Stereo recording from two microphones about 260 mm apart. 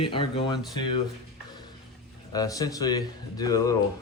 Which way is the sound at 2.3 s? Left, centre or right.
Centre.